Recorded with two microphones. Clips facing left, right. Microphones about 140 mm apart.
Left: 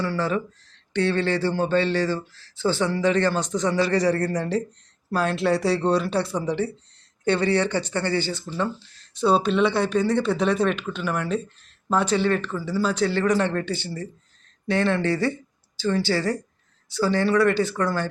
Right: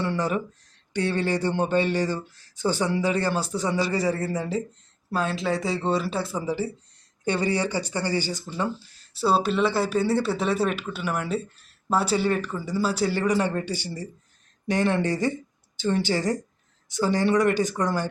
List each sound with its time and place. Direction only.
0.0 s speech: 20° right (ahead or behind)